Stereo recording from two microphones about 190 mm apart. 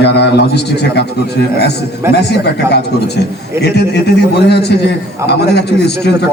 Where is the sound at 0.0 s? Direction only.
60° left (ahead or behind).